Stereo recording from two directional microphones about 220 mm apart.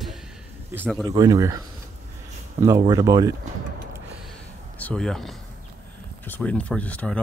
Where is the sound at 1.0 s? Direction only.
20° right (ahead or behind).